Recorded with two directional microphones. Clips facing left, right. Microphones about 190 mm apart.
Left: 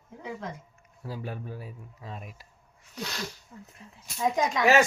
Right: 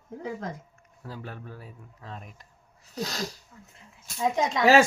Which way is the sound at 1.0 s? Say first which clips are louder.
Left 3 dB; 10° left (ahead or behind).